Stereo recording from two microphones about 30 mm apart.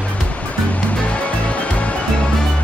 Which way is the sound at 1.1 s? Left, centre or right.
Left.